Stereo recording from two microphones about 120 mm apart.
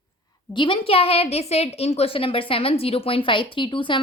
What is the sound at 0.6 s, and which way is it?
A woman's voice, 45° left (ahead or behind).